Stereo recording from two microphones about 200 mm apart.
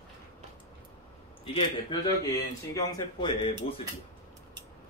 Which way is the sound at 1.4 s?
25° left (ahead or behind).